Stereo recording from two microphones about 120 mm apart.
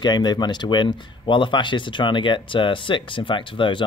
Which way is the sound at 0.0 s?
35° left (ahead or behind).